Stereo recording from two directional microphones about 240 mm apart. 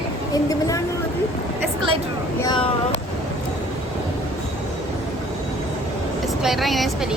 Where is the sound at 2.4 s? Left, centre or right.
Centre.